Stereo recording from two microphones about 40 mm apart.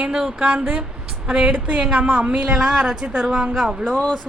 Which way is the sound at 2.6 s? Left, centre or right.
Centre.